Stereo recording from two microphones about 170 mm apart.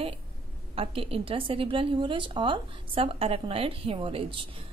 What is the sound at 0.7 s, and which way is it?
A woman's voice, 35° right (ahead or behind).